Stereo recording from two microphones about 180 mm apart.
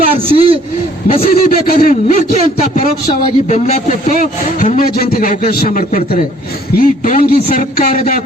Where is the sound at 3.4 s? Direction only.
40° left (ahead or behind).